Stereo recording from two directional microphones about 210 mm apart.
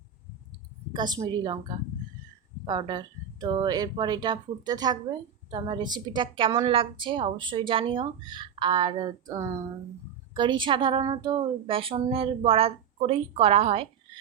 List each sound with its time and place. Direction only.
0.9 s a woman's voice: 20° right (ahead or behind)